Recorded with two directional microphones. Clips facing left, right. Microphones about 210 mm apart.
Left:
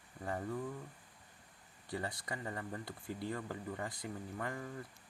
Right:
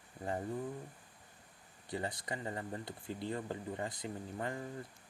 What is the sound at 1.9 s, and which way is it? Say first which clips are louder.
Speech: right 2 dB; 20° right (ahead or behind).